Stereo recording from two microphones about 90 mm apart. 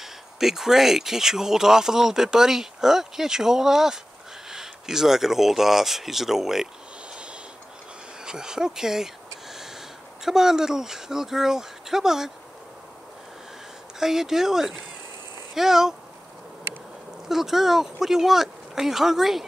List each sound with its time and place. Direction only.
0.0 s speech: 5° right (ahead or behind)
8.2 s speech: 10° right (ahead or behind)
13.9 s speech: 5° right (ahead or behind)
17.3 s speech: 5° right (ahead or behind)